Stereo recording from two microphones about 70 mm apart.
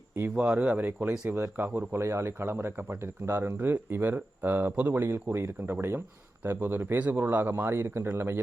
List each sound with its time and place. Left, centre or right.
0.3 s speech: centre
1.9 s speech: right